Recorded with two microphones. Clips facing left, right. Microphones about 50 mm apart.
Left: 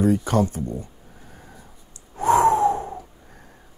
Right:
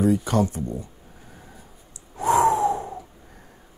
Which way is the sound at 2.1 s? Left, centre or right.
Left.